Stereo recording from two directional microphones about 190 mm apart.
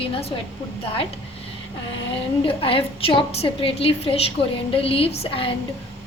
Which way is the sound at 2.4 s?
30° left (ahead or behind).